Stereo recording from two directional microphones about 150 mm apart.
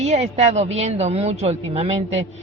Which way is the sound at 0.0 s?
50° right (ahead or behind).